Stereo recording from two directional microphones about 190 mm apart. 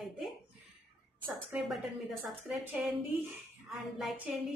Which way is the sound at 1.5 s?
5° right (ahead or behind).